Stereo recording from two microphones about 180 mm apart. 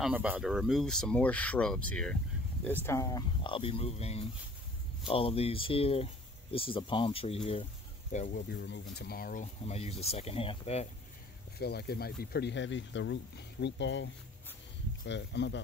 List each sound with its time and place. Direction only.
0.0 s speech: 5° right (ahead or behind); by 8.4 s 40° left (ahead or behind)
8.4 s speech: 70° left (ahead or behind); by 10.9 s 35° left (ahead or behind)
11.5 s speech: 65° left (ahead or behind); by 14.1 s 85° left
15.0 s speech: 75° left (ahead or behind)